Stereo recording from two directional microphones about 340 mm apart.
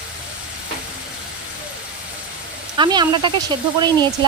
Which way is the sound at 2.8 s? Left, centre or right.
Centre.